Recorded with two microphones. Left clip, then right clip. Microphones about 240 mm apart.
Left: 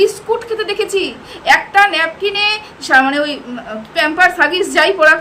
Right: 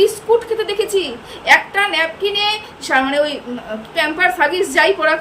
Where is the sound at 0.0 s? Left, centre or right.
Centre.